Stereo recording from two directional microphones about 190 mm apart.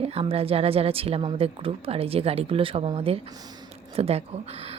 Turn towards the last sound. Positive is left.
turn(degrees=-35)  # may be behind; listen again after turning